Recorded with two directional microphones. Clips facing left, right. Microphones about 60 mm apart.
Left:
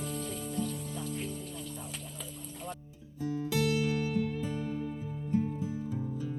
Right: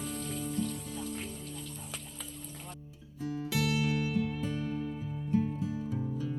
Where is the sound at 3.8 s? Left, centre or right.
Right.